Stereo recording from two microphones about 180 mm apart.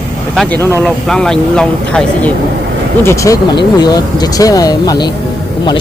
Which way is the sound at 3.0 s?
15° left (ahead or behind).